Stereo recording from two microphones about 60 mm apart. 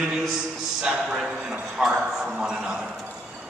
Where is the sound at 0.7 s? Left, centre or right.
Centre.